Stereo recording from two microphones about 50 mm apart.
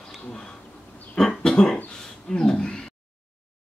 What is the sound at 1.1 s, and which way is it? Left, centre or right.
Cough, centre.